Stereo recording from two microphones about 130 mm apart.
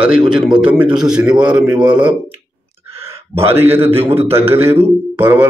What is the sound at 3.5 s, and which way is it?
Mantra, 20° right (ahead or behind).